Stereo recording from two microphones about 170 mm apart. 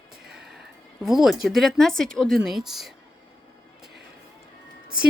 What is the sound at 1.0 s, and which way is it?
Speech, centre (ahead or behind).